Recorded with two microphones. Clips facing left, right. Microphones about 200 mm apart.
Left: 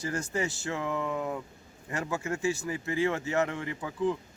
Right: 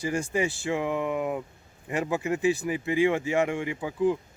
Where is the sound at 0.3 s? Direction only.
15° right (ahead or behind).